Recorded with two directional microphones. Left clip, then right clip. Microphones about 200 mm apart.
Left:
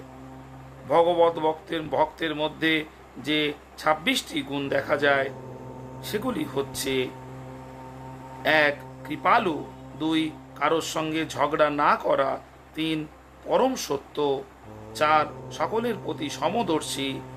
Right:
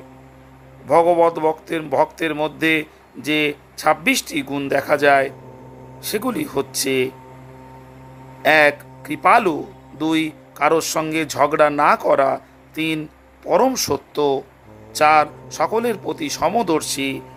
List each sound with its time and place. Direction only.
0.9 s speech: 30° right (ahead or behind)
8.4 s speech: 30° right (ahead or behind)